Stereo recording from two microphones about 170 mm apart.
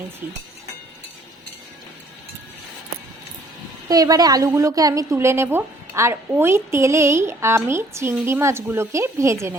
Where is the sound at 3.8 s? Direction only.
20° right (ahead or behind).